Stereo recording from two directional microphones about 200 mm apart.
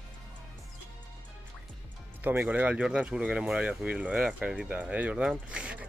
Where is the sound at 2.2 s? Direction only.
10° right (ahead or behind).